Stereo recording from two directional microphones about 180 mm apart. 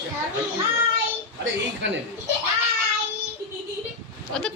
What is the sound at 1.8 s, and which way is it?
Speech, 80° right.